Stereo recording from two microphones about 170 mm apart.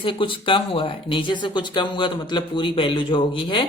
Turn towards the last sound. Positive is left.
turn(degrees=30)  # may be behind; listen again after turning